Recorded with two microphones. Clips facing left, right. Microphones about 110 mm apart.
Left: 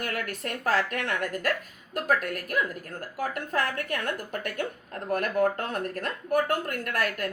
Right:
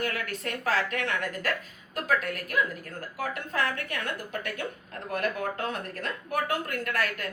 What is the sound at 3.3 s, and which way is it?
A woman's voice, 45° left (ahead or behind).